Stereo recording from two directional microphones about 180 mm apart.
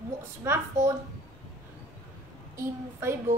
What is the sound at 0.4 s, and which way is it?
Speech, 15° right (ahead or behind).